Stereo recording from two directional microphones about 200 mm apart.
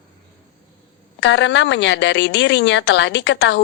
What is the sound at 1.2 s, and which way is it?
A woman's voice, 60° left (ahead or behind).